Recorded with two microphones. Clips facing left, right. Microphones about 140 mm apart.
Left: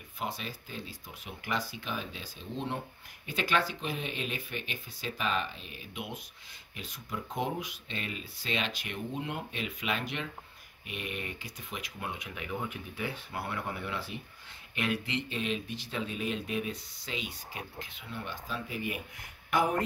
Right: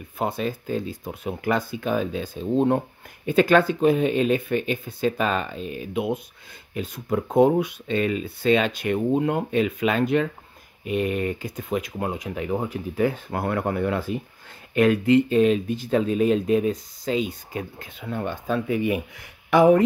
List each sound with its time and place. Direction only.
0.2 s speech: 45° right (ahead or behind)
6.7 s speech: 55° right (ahead or behind); by 19.8 s 90° right